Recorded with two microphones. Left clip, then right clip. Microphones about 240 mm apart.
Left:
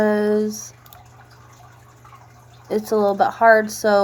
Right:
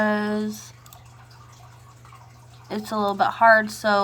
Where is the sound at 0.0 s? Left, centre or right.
Right.